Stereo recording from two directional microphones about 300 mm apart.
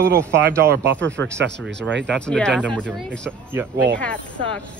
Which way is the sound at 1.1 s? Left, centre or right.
Right.